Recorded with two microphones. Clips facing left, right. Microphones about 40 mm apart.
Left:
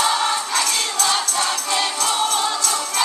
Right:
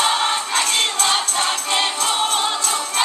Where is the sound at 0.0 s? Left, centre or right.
Right.